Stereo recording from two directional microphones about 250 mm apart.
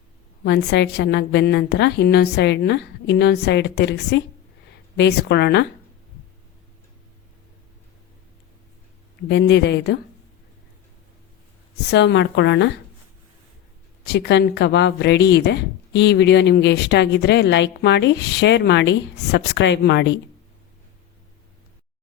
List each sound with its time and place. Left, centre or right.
0.4 s a woman's voice: left
9.3 s a woman's voice: left
11.9 s a woman's voice: left
14.0 s a woman's voice: left